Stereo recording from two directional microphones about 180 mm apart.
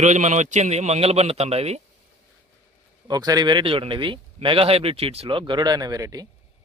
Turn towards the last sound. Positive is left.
turn(degrees=-20)  # may be behind; listen again after turning